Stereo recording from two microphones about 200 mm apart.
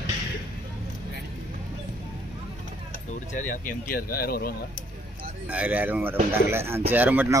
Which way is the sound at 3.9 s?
50° left (ahead or behind).